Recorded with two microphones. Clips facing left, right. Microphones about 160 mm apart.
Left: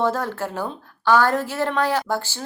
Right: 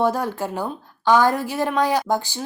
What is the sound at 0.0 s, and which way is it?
A woman's voice, 15° right (ahead or behind).